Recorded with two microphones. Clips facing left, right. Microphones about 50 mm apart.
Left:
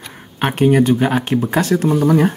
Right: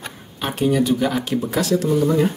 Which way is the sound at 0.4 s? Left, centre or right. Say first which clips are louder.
Left 5 dB; left.